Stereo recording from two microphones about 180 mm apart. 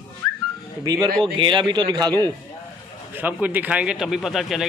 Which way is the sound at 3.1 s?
10° right (ahead or behind).